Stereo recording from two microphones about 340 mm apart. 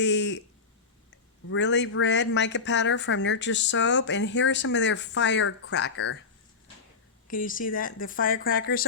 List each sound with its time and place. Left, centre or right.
0.0 s a sound: left
1.5 s speech: left
7.3 s speech: left